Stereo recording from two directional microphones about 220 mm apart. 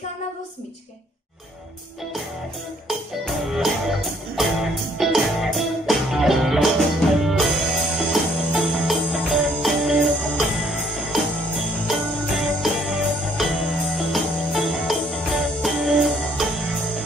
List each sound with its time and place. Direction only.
2.9 s music: centre (ahead or behind)